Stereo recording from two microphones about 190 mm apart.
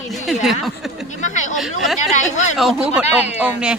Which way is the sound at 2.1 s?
40° left (ahead or behind).